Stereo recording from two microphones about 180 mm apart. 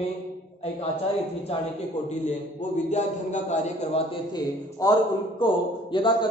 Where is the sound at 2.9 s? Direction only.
40° left (ahead or behind).